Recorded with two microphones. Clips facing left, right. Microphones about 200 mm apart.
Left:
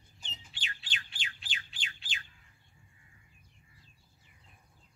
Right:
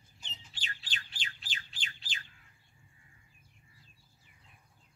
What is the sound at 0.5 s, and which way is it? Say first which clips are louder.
Bird: even; 40° right (ahead or behind).